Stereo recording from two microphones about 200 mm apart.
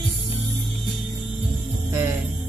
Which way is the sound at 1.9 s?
15° right (ahead or behind).